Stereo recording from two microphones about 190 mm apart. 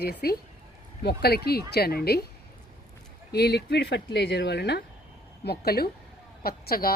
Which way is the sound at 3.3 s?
60° left (ahead or behind).